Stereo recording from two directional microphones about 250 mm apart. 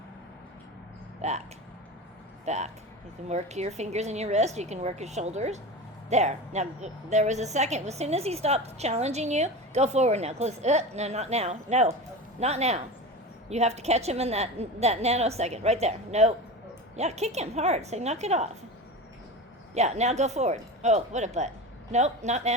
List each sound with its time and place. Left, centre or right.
1.2 s speech: right
2.4 s a woman's voice: right
19.7 s a woman's voice: right